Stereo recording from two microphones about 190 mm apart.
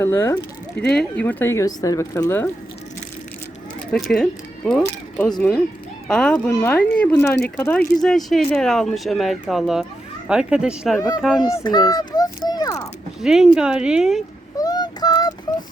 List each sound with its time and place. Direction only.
0.0 s speech: 15° left (ahead or behind)
3.9 s speech: centre (ahead or behind)
11.3 s a child's voice: 20° left (ahead or behind)
13.2 s speech: 5° right (ahead or behind)
14.6 s child singing: 20° left (ahead or behind)